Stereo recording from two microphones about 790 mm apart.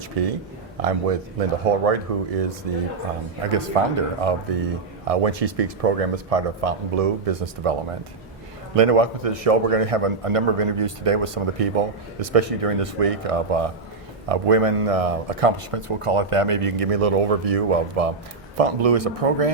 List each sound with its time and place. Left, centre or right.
0.2 s a man's voice: right